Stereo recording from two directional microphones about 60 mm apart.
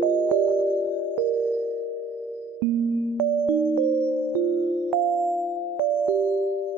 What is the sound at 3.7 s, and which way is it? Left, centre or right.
Music, right.